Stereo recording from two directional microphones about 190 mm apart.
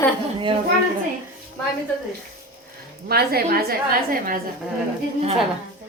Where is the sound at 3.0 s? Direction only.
55° right (ahead or behind).